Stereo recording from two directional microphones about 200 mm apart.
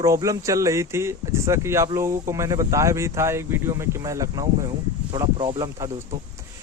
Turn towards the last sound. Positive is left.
turn(degrees=-15)  # may be behind; listen again after turning